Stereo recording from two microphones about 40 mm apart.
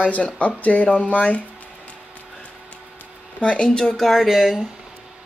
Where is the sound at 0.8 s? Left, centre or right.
Left.